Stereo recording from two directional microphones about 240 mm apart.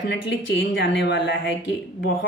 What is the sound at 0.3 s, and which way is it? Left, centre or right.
A woman's voice, left.